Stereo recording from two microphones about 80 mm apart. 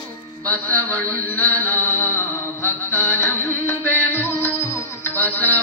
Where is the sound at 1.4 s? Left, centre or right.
Left.